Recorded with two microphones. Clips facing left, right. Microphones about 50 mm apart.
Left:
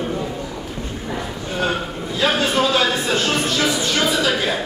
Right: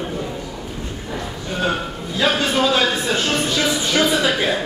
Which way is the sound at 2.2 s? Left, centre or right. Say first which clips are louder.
Even; centre.